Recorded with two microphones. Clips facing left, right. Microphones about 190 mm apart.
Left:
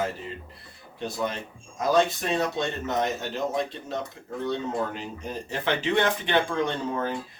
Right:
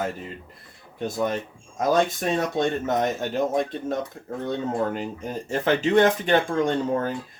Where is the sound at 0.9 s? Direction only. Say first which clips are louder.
Right 4 dB; 45° right (ahead or behind).